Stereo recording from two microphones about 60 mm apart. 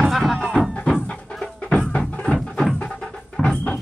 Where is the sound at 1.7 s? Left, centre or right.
Centre.